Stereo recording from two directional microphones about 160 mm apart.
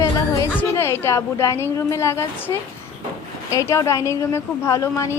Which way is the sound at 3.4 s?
20° left (ahead or behind).